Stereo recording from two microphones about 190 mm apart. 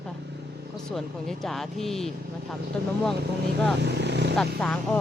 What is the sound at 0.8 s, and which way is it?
Speech, centre (ahead or behind).